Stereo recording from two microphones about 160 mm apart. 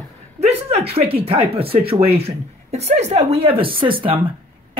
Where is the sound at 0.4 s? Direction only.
40° right (ahead or behind).